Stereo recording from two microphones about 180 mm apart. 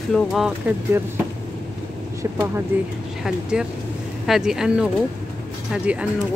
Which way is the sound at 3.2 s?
5° right (ahead or behind).